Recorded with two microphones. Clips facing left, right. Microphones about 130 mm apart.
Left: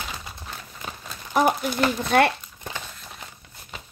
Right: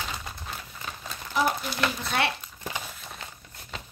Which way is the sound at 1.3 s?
50° left (ahead or behind).